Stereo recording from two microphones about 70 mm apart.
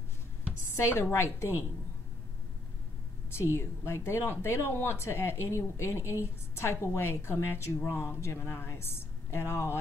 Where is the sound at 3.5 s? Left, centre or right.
Left.